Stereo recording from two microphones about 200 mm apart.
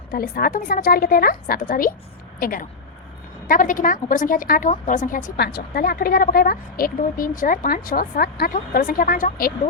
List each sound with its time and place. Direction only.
0.1 s a woman's voice: 45° left (ahead or behind)